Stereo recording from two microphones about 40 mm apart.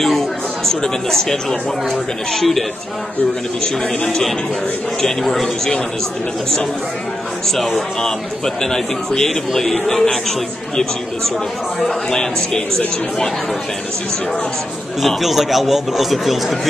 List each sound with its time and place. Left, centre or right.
0.7 s speech: centre
3.6 s speech: centre
5.0 s speech: centre
7.4 s speech: centre
8.6 s speech: centre
11.8 s speech: centre
15.0 s speech: centre